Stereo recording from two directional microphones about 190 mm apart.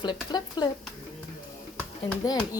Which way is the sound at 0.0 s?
20° left (ahead or behind).